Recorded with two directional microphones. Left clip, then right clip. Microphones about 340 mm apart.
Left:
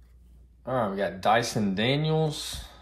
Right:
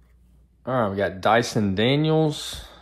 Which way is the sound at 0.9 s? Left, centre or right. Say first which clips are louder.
Right 3 dB; right.